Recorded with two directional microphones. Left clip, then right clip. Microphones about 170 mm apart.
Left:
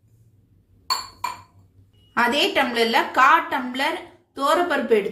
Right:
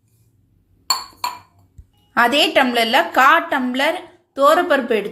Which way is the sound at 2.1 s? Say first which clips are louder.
Right 5 dB; 30° right (ahead or behind).